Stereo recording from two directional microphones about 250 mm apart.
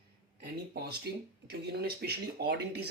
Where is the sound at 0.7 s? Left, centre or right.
Right.